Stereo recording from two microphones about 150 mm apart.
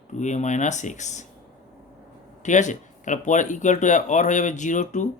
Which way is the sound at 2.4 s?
55° left (ahead or behind).